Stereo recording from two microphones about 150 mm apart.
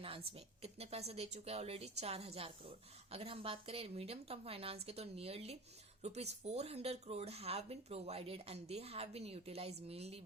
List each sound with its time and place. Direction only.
0.3 s speech: 40° right (ahead or behind)